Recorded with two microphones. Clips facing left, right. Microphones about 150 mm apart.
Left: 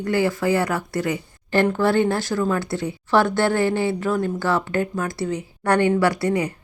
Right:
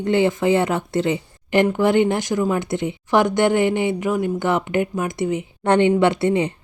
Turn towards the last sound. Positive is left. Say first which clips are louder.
# right 3 dB
turn(degrees=-25)  # may be behind; listen again after turning